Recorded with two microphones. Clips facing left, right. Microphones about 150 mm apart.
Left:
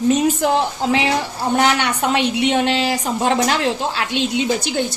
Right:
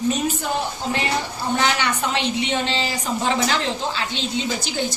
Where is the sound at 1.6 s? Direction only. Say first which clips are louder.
Left 5 dB; 60° left (ahead or behind).